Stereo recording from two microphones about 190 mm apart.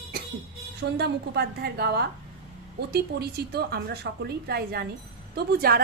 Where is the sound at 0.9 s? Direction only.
60° right (ahead or behind).